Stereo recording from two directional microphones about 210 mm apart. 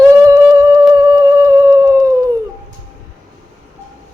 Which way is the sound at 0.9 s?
15° right (ahead or behind).